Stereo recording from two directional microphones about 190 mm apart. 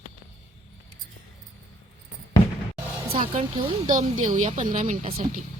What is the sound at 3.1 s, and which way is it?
Speech, 30° right (ahead or behind).